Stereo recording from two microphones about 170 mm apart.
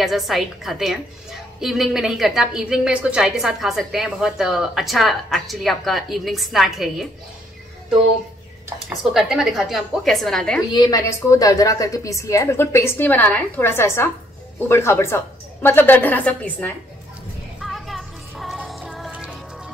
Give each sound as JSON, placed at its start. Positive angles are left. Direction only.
{"t": 0.0, "sound": "a woman's voice", "side_deg": 0}
{"t": 9.1, "sound": "a woman's voice", "side_deg": 0}
{"t": 10.7, "sound": "a woman's voice", "side_deg": 25}
{"t": 17.6, "sound": "music", "side_deg": 0}